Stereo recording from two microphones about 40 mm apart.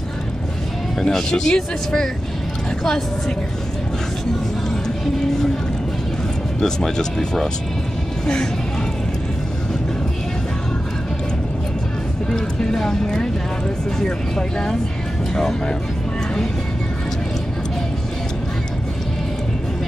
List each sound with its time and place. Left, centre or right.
1.0 s speech: centre
6.6 s speech: centre
12.3 s speech: centre